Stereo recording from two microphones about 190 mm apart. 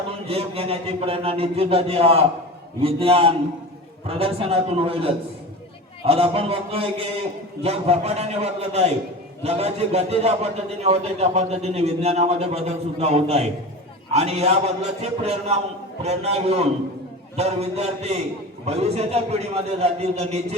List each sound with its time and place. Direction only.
0.1 s a man's voice: 30° right (ahead or behind)